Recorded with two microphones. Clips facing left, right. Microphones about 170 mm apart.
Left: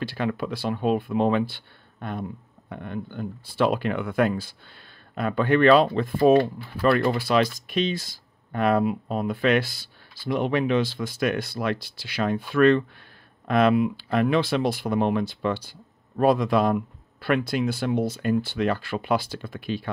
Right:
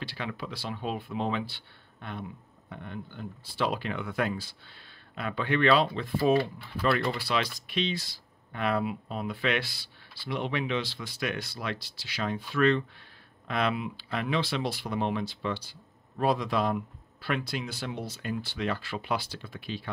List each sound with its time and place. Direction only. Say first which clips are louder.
0.0 s speech: left 9 dB; 50° left (ahead or behind)